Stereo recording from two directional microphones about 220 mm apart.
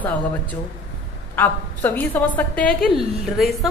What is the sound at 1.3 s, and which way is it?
A woman's voice, 10° left (ahead or behind).